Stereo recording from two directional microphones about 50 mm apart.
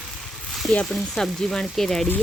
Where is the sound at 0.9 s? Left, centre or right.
Centre.